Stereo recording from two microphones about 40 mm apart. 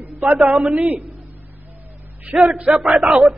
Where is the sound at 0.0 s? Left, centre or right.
Right.